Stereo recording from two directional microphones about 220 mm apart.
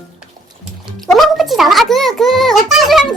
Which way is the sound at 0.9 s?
Centre (ahead or behind).